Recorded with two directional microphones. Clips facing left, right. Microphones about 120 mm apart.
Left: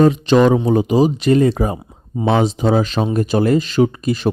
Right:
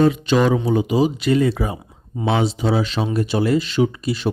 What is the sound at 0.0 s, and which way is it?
Speech, 40° left (ahead or behind).